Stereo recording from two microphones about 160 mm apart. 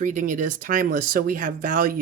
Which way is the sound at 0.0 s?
55° right (ahead or behind).